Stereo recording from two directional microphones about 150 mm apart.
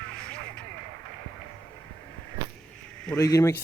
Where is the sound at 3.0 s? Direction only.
20° left (ahead or behind).